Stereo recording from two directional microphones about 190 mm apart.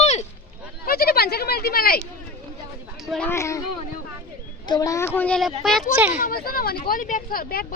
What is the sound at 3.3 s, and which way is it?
Speech, 15° left (ahead or behind).